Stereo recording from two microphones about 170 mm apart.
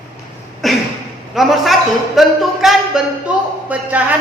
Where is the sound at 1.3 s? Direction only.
Centre (ahead or behind).